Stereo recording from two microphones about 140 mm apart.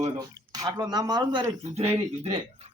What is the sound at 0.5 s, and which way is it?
Speech, 30° right (ahead or behind).